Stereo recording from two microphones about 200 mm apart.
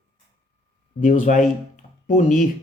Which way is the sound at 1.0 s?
40° left (ahead or behind).